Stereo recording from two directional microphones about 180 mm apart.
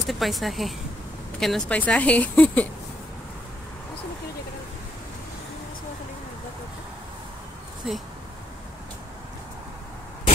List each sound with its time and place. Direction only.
0.0 s a woman's voice: centre (ahead or behind)
7.8 s speech: 5° right (ahead or behind)